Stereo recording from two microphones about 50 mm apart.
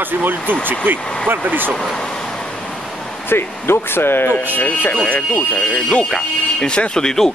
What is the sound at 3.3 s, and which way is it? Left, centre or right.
Speech, left.